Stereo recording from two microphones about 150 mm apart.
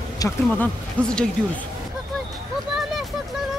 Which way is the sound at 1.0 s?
10° left (ahead or behind).